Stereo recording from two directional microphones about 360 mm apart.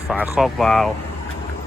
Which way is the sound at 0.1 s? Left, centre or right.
Centre.